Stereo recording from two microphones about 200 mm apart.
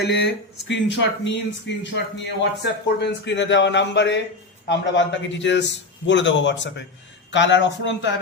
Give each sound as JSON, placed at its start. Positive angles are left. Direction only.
{"t": 0.0, "sound": "speech", "side_deg": 55}